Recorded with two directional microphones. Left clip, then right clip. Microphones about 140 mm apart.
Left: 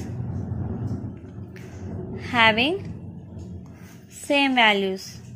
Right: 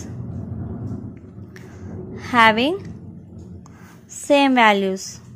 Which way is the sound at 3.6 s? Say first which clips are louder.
Right 1 dB; 50° right (ahead or behind).